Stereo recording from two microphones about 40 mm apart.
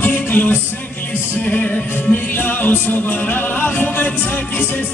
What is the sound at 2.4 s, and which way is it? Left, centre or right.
Music, left.